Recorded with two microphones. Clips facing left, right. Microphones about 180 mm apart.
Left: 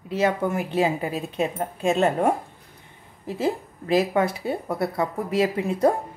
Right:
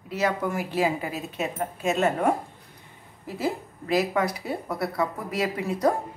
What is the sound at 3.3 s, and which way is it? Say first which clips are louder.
A woman's voice: left 3 dB; 25° left (ahead or behind).